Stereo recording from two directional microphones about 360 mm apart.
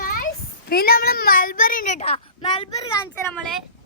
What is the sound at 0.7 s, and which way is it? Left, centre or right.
A child's voice, left.